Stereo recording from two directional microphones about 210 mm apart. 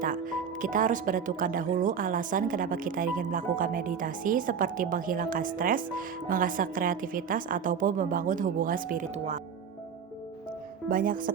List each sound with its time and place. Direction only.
0.0 s speech: 40° right (ahead or behind)
10.8 s speech: 40° right (ahead or behind)